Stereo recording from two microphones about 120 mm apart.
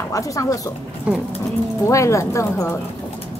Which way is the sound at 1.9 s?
25° left (ahead or behind).